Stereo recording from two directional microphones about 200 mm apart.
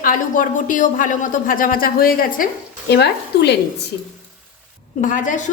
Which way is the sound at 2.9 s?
55° left (ahead or behind).